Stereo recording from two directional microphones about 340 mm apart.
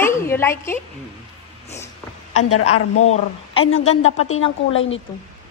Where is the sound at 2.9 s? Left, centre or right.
Left.